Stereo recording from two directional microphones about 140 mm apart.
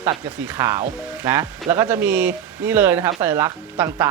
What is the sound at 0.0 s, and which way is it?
Speech, 10° right (ahead or behind).